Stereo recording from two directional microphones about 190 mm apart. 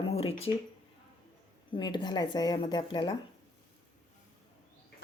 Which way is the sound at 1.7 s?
25° left (ahead or behind).